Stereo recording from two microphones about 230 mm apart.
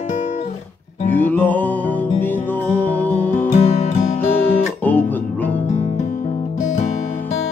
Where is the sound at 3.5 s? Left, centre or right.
Left.